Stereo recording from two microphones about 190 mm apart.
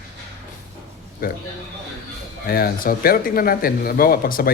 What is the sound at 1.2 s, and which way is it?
Speech, 50° left (ahead or behind).